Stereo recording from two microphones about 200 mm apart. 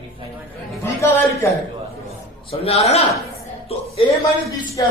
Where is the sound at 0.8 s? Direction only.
15° left (ahead or behind).